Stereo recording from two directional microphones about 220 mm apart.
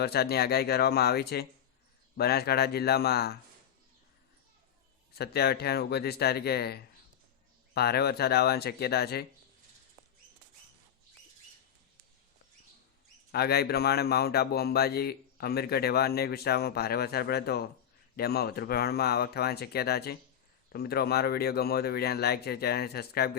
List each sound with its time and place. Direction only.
0.0 s speech: 45° left (ahead or behind)
5.1 s speech: 45° left (ahead or behind)
13.3 s speech: 45° left (ahead or behind)